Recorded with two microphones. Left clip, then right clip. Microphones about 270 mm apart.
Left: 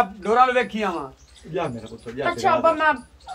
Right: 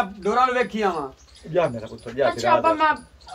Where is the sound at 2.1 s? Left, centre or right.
Centre.